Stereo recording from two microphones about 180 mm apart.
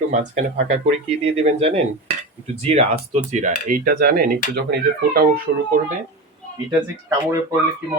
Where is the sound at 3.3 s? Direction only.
45° right (ahead or behind).